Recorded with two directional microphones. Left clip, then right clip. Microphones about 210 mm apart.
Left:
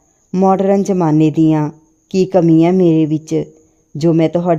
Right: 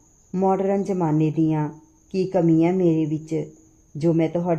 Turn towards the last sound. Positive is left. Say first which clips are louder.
# left 8 dB
turn(degrees=50)  # may be behind; listen again after turning